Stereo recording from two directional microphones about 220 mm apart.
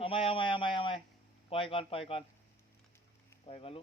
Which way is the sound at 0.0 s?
25° left (ahead or behind).